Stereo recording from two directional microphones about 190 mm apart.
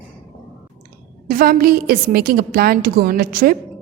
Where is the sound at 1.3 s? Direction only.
50° right (ahead or behind).